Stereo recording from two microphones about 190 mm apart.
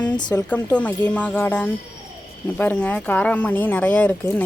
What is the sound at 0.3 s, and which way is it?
Speech, 10° left (ahead or behind).